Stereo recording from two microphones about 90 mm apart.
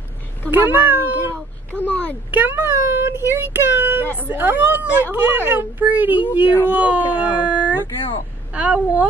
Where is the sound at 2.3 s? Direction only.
20° right (ahead or behind).